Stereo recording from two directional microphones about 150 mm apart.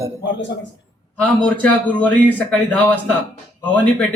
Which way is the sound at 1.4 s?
10° left (ahead or behind).